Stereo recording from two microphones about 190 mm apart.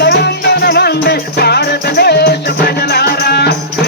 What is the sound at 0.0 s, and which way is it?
Music, 60° left (ahead or behind).